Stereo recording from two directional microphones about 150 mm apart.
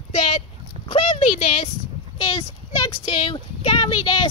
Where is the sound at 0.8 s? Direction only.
40° left (ahead or behind).